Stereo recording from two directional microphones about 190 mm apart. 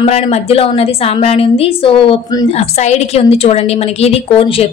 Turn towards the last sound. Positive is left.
turn(degrees=30)  # may be behind; listen again after turning